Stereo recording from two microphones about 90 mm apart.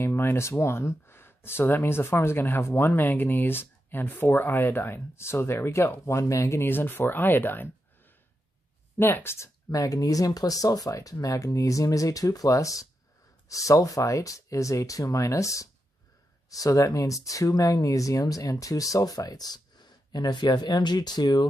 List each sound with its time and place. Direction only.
0.0 s speech: 25° left (ahead or behind)
8.9 s speech: 25° left (ahead or behind)
9.7 s speech: 40° left (ahead or behind)